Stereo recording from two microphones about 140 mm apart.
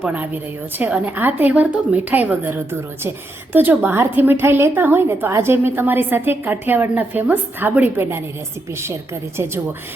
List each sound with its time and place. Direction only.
0.0 s a woman's voice: 10° right (ahead or behind)